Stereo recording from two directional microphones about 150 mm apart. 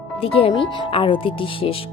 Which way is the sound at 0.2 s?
40° left (ahead or behind).